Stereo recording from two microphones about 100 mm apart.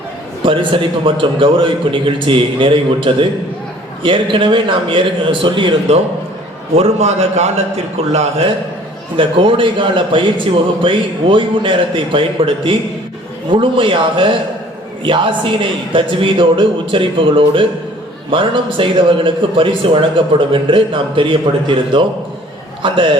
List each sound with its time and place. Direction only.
0.4 s a man's voice: 60° right (ahead or behind)
6.7 s a man's voice: 90° right
9.1 s a man's voice: 60° right (ahead or behind)